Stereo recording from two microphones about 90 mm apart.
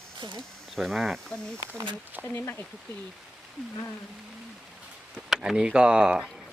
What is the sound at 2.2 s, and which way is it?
Speech, 25° left (ahead or behind).